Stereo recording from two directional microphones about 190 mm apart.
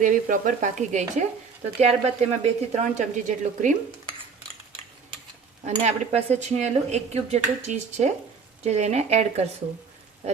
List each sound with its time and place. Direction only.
0.0 s speech: 45° right (ahead or behind)
5.6 s speech: 35° right (ahead or behind)